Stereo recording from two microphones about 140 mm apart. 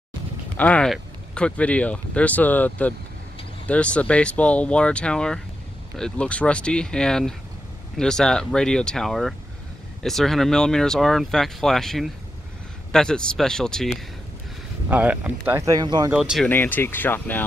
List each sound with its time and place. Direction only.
0.6 s speech: 10° left (ahead or behind)
14.9 s speech: 10° right (ahead or behind)
15.6 s speech: 25° right (ahead or behind)
16.1 s speech: 5° right (ahead or behind)
16.4 s speech: 15° left (ahead or behind)